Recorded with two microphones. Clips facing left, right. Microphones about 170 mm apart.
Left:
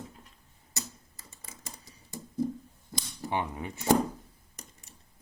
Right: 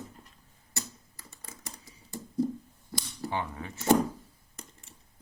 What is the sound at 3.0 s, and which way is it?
Cap gun, 15° left (ahead or behind).